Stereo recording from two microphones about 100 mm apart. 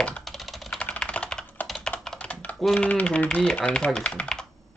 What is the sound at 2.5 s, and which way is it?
Speech, 5° left (ahead or behind).